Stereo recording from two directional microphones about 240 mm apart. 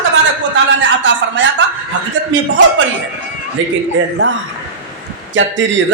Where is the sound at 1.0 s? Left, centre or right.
Right.